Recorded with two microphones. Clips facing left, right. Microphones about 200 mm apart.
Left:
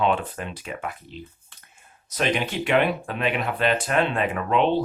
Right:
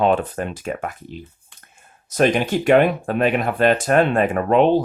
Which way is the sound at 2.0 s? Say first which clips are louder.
Right 7 dB; 45° right (ahead or behind).